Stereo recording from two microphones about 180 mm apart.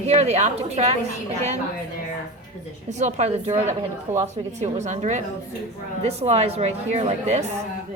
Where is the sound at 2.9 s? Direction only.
40° right (ahead or behind).